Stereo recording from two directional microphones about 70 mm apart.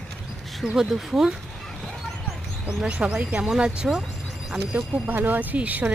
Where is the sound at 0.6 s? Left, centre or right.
Centre.